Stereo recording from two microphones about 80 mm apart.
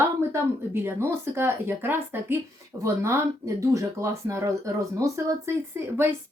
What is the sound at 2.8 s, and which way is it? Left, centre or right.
Speech, right.